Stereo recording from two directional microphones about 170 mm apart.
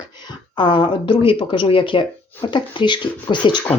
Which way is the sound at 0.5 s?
30° left (ahead or behind).